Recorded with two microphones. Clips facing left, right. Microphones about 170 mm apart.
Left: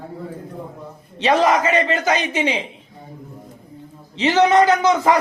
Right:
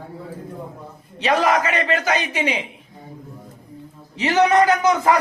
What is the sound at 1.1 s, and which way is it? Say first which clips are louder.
A man's voice: left 2 dB; 25° left (ahead or behind).